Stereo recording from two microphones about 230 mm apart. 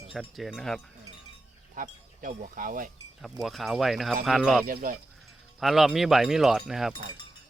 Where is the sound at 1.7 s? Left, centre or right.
Right.